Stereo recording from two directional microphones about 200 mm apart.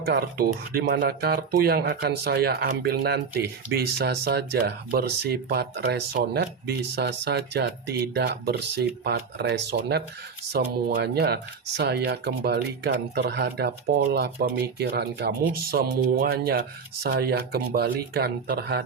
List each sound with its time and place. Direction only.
0.0 s speech: 50° right (ahead or behind)